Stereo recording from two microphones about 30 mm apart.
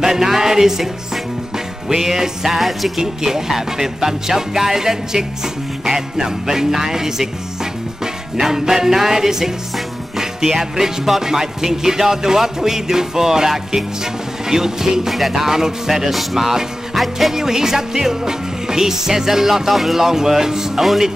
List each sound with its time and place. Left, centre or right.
0.0 s music: centre
2.5 s speech: centre
3.0 s music: centre
16.1 s speech: centre
17.3 s music: centre